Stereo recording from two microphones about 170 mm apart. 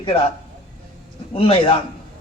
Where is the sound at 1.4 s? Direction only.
30° left (ahead or behind).